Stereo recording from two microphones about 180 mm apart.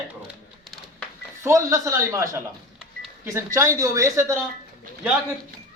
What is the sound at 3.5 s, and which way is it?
Speech, 15° right (ahead or behind).